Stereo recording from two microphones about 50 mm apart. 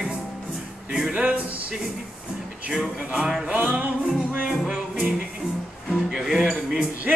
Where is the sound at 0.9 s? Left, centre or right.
Centre.